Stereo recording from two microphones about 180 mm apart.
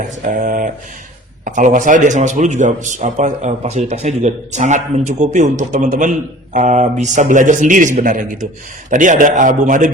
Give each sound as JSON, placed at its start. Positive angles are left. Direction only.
{"t": 0.0, "sound": "a man's voice", "side_deg": -45}